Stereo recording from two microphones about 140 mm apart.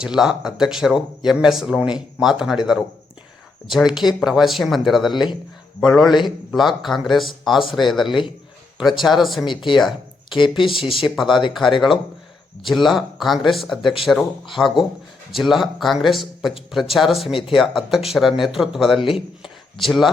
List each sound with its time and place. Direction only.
0.0 s speech: 5° right (ahead or behind)
3.7 s speech: centre (ahead or behind)
5.1 s speech: 30° left (ahead or behind)
5.8 s speech: centre (ahead or behind)
9.7 s a sound: centre (ahead or behind)
10.3 s speech: 35° left (ahead or behind)
10.9 s speech: centre (ahead or behind)
12.6 s speech: centre (ahead or behind)